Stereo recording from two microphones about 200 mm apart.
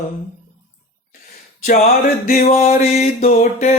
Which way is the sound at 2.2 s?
45° left (ahead or behind).